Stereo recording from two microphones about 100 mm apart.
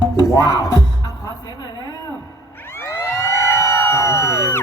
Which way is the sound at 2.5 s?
25° left (ahead or behind).